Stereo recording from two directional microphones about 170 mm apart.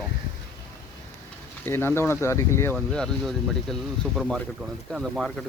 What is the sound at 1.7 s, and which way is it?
Speech, 15° left (ahead or behind).